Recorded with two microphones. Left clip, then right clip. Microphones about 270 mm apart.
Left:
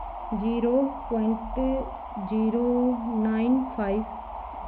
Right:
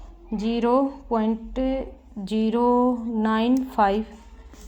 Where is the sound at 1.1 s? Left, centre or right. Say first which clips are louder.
Right 6 dB; right.